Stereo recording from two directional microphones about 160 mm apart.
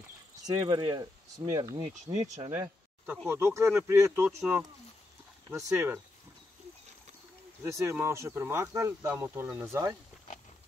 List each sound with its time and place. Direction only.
0.5 s speech: 25° right (ahead or behind)
7.6 s speech: 15° right (ahead or behind)